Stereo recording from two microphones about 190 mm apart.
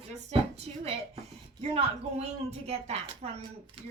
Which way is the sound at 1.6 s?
35° right (ahead or behind).